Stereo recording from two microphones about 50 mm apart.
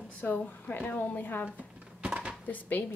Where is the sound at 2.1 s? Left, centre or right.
Right.